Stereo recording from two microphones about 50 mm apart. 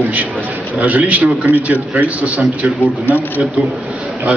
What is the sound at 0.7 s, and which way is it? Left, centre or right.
A man's voice, right.